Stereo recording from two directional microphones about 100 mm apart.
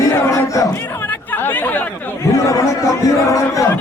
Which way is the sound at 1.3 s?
20° left (ahead or behind).